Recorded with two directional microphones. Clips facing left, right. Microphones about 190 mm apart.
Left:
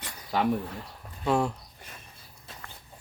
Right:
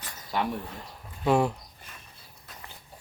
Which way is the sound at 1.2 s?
5° right (ahead or behind).